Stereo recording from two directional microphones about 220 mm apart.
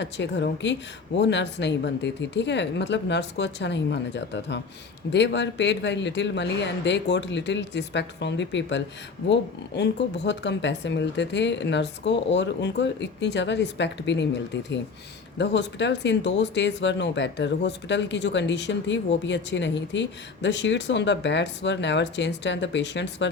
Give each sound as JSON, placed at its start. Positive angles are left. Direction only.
{"t": 0.0, "sound": "speech", "side_deg": 50}